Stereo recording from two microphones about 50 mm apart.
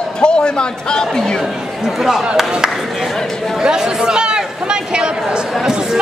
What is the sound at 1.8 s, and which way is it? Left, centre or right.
A man's voice, centre.